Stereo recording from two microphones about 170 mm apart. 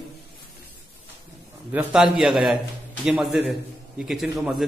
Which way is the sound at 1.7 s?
10° right (ahead or behind).